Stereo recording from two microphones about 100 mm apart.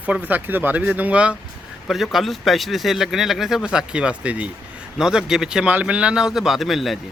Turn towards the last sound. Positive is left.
turn(degrees=0)  # may be behind; listen again after turning